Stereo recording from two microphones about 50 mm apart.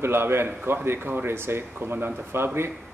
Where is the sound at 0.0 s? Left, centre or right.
Right.